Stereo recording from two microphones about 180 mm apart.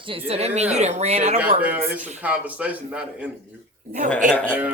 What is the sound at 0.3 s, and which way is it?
Speech, 35° right (ahead or behind).